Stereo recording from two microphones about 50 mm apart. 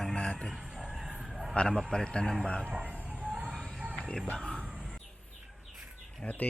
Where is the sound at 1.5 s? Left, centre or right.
Centre.